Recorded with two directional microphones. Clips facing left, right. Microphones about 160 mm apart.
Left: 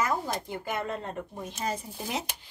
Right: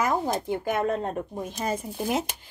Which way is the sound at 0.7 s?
45° right (ahead or behind).